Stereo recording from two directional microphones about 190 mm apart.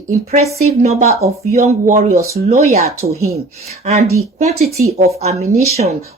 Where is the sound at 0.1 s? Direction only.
40° right (ahead or behind).